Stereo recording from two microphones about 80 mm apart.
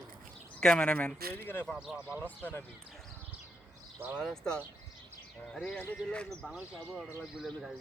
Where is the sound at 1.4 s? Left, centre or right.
Left.